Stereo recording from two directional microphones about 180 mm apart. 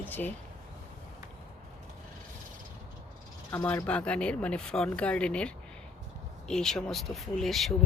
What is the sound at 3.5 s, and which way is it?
Speech, 15° left (ahead or behind).